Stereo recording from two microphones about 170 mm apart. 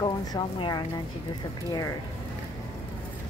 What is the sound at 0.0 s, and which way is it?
Speech, 25° left (ahead or behind).